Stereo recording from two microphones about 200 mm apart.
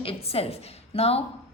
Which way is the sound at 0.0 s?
30° left (ahead or behind).